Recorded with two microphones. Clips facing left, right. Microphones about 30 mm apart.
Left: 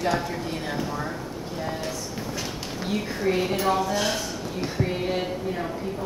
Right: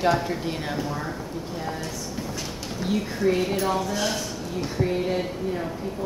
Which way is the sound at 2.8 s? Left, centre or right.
Centre.